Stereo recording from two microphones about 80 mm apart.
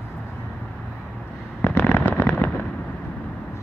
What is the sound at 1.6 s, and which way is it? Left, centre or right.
Fireworks, left.